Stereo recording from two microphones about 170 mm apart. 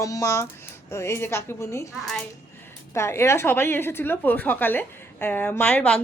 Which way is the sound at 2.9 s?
15° left (ahead or behind).